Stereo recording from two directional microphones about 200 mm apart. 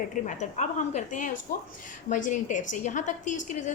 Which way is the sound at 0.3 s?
35° left (ahead or behind).